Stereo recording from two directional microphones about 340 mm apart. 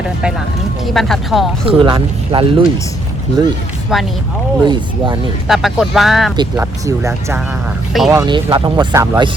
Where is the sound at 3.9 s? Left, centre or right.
Centre.